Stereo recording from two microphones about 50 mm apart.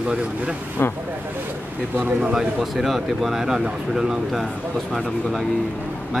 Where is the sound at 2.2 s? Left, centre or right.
Centre.